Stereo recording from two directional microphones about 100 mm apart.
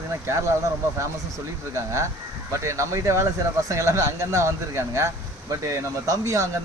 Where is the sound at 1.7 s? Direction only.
30° right (ahead or behind).